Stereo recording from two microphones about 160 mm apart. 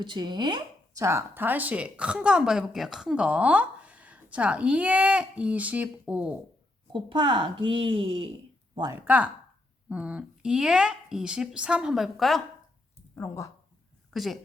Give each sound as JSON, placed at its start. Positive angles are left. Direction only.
{"t": 0.0, "sound": "speech", "side_deg": -30}
{"t": 1.0, "sound": "a woman's voice", "side_deg": -15}
{"t": 6.9, "sound": "a woman's voice", "side_deg": -30}
{"t": 9.0, "sound": "a woman's voice", "side_deg": -10}
{"t": 13.1, "sound": "speech", "side_deg": 20}
{"t": 14.1, "sound": "speech", "side_deg": 0}